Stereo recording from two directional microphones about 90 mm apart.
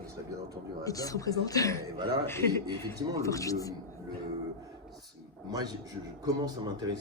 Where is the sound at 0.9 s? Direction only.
40° left (ahead or behind).